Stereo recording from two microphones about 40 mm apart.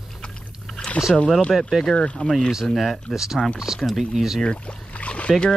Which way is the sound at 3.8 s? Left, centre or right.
Centre.